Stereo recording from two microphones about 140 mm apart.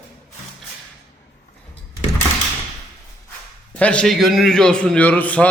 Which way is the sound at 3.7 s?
10° left (ahead or behind).